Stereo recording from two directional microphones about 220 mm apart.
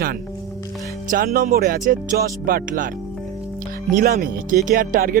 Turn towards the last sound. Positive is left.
turn(degrees=-40)  # may be behind; listen again after turning